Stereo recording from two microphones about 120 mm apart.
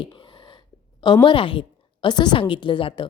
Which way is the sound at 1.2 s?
45° left (ahead or behind).